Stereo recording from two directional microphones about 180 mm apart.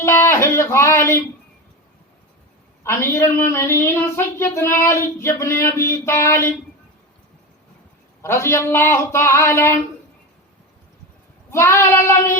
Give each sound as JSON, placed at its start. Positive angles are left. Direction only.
{"t": 0.0, "sound": "a sound", "side_deg": 15}
{"t": 2.8, "sound": "speech", "side_deg": 15}
{"t": 8.2, "sound": "speech", "side_deg": 15}
{"t": 11.5, "sound": "speech", "side_deg": 15}